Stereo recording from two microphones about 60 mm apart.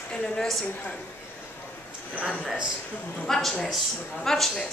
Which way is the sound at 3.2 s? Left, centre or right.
Centre.